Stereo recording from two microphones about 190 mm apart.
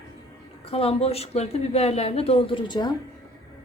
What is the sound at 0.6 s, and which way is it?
Speech, 30° left (ahead or behind).